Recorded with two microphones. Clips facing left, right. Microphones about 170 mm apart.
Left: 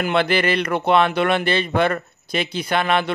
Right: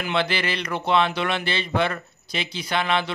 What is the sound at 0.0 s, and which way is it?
Speech, 55° left (ahead or behind).